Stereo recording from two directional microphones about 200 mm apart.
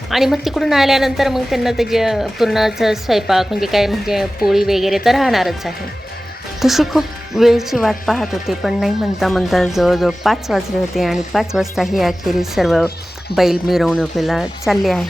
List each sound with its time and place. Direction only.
0.1 s a woman's voice: centre (ahead or behind)